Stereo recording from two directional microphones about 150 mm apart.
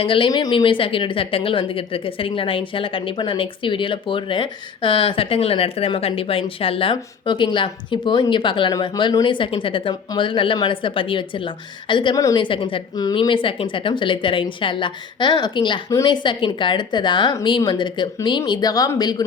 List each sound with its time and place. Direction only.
0.0 s a woman's voice: 35° left (ahead or behind)